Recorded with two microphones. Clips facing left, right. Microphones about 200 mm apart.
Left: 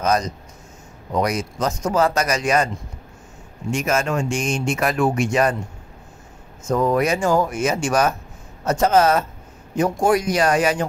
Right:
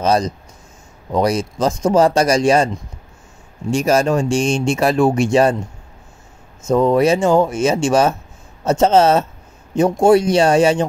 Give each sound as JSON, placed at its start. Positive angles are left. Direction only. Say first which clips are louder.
{"t": 0.0, "sound": "speech", "louder": "right 4 dB", "side_deg": -30}
{"t": 3.7, "sound": "speech", "louder": "right 6 dB", "side_deg": -35}
{"t": 6.7, "sound": "speech", "louder": "right 5 dB", "side_deg": -25}